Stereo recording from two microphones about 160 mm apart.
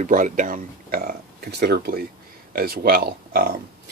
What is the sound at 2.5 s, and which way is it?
Speech, 70° right (ahead or behind).